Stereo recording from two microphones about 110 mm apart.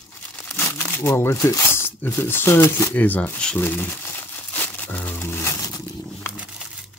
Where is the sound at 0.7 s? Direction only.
20° left (ahead or behind).